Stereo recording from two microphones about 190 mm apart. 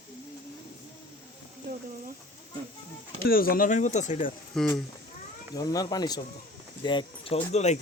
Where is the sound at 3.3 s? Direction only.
50° left (ahead or behind).